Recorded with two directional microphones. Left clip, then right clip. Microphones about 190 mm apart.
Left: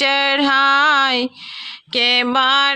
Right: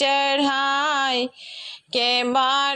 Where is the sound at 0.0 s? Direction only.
15° left (ahead or behind).